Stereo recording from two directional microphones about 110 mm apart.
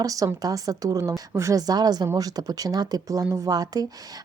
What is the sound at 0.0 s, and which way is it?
A woman's voice, 30° right (ahead or behind).